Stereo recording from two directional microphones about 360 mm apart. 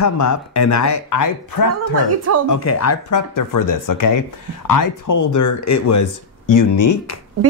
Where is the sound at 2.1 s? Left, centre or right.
Right.